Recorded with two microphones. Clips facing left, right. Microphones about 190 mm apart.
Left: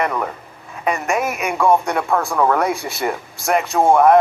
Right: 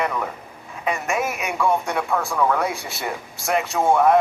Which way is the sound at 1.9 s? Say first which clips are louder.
Left 4 dB; 50° left (ahead or behind).